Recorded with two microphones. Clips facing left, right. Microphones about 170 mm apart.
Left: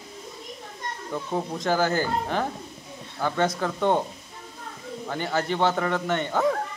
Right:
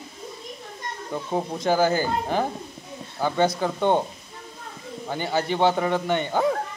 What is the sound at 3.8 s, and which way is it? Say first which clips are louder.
Speech: right 1 dB; 25° right (ahead or behind).